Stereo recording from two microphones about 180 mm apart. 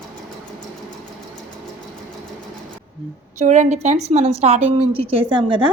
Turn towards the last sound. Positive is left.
turn(degrees=-30)  # may be behind; listen again after turning